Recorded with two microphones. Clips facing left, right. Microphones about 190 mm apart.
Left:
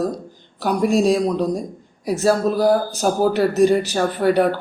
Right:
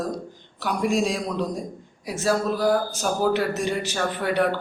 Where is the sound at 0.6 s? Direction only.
40° left (ahead or behind).